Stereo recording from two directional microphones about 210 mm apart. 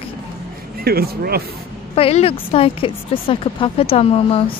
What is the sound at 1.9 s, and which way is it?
A woman's voice, 25° left (ahead or behind).